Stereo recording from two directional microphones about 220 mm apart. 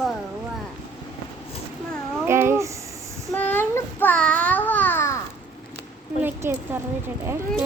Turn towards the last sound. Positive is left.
turn(degrees=-10)  # may be behind; listen again after turning